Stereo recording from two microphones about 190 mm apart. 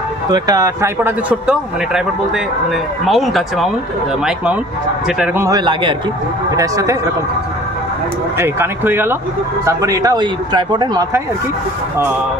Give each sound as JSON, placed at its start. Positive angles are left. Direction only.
{"t": 0.3, "sound": "a man's voice", "side_deg": -20}
{"t": 5.0, "sound": "a man's voice", "side_deg": -10}
{"t": 8.4, "sound": "a man's voice", "side_deg": -10}